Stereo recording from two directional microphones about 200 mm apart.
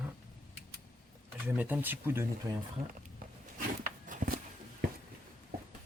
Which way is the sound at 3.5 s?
45° right (ahead or behind).